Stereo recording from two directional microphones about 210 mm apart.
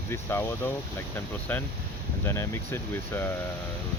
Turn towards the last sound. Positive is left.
turn(degrees=10)  # may be behind; listen again after turning